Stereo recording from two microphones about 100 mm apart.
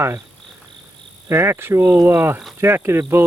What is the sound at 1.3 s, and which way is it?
Speech, 25° right (ahead or behind).